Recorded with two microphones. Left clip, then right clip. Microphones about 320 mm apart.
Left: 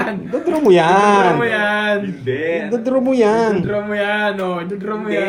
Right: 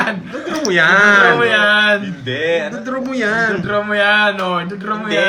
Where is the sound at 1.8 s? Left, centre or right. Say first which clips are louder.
Right 4 dB; right.